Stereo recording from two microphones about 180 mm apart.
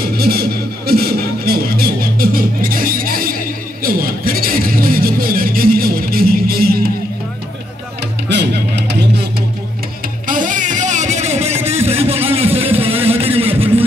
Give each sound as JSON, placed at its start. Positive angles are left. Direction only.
{"t": 0.0, "sound": "music", "side_deg": -60}
{"t": 8.3, "sound": "music", "side_deg": -70}
{"t": 10.2, "sound": "music", "side_deg": -45}